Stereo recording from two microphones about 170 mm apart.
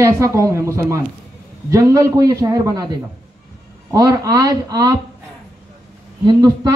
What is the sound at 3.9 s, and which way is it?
A man's voice, 20° right (ahead or behind).